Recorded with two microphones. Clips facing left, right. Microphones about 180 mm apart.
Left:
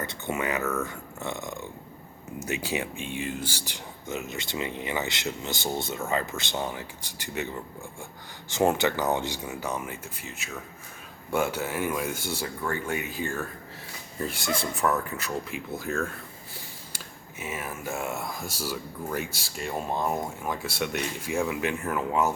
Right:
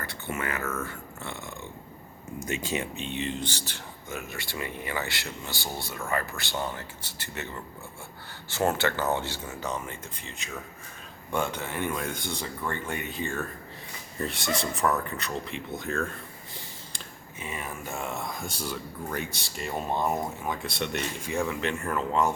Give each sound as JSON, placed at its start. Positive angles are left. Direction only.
{"t": 0.0, "sound": "speech", "side_deg": 20}
{"t": 17.4, "sound": "speech", "side_deg": 5}